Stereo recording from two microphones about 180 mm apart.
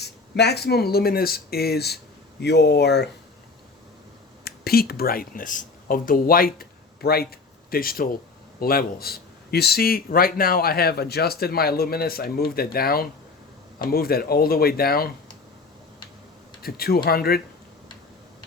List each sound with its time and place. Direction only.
0.0 s a man's voice: 65° left (ahead or behind)
4.4 s a man's voice: 60° left (ahead or behind)
16.6 s a man's voice: 55° left (ahead or behind)